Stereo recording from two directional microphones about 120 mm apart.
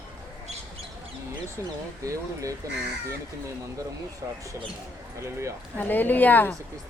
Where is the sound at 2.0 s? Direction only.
25° right (ahead or behind).